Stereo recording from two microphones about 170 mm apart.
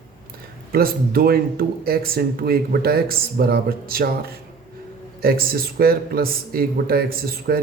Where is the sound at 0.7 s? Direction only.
60° right (ahead or behind).